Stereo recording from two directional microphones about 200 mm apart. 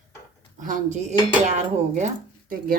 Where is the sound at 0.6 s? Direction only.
40° right (ahead or behind).